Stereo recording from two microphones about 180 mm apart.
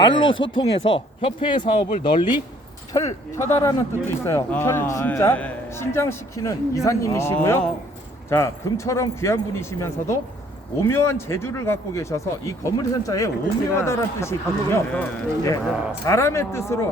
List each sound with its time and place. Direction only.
0.0 s speech: 25° left (ahead or behind)
3.3 s speech: 15° left (ahead or behind)